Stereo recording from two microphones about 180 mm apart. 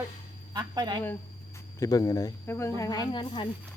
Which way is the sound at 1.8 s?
20° left (ahead or behind).